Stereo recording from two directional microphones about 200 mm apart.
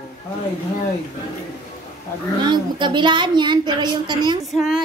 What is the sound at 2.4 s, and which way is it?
A woman's voice, 20° right (ahead or behind).